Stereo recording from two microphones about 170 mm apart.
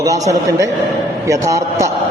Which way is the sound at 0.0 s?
20° right (ahead or behind).